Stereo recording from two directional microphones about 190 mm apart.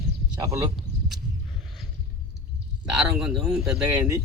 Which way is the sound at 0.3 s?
15° right (ahead or behind).